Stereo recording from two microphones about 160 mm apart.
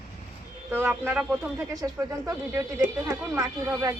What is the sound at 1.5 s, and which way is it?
Speech, 20° right (ahead or behind).